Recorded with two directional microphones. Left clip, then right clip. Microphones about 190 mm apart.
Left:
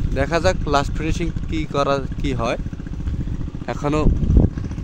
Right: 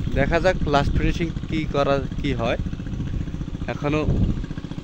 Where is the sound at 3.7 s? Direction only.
20° left (ahead or behind).